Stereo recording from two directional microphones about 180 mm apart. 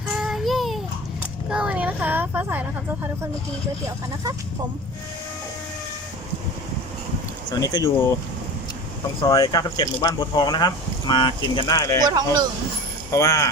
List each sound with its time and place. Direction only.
0.1 s child singing: centre (ahead or behind)
1.5 s a sound: 5° right (ahead or behind)
7.5 s speech: 20° left (ahead or behind)
9.2 s speech: 20° left (ahead or behind)
12.0 s speech: 25° right (ahead or behind)
13.1 s speech: 20° left (ahead or behind)